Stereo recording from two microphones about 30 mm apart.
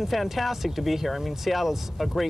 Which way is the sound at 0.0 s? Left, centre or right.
Centre.